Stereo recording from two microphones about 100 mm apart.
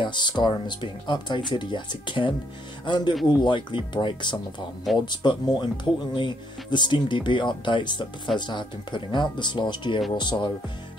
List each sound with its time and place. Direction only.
0.0 s speech: 50° left (ahead or behind)